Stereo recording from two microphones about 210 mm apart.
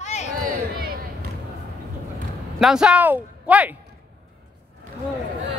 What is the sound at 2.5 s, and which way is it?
Speech, 5° right (ahead or behind).